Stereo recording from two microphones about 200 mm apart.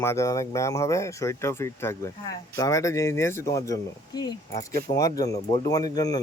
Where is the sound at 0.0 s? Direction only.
15° left (ahead or behind).